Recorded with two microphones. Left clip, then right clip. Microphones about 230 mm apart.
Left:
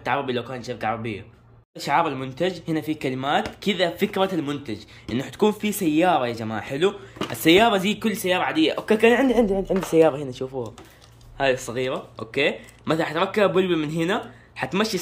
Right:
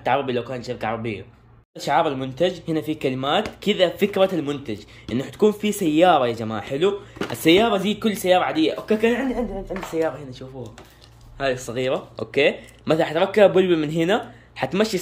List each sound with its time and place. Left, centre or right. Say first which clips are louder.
0.0 s speech: right 3 dB; centre
9.3 s a woman's voice: left 7 dB; left
11.3 s speech: left 1 dB; centre